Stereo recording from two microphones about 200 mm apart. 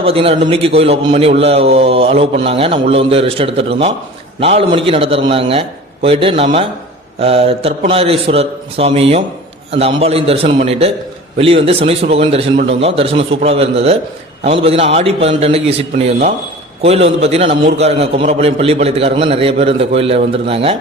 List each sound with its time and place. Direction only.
0.0 s a man's voice: 30° right (ahead or behind)